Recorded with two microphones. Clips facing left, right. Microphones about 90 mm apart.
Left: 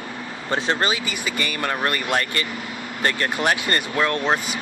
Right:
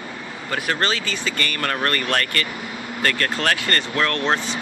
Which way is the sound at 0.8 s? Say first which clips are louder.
Even; 15° left (ahead or behind).